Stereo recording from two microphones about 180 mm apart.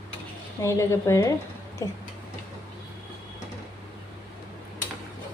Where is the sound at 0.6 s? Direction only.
15° left (ahead or behind).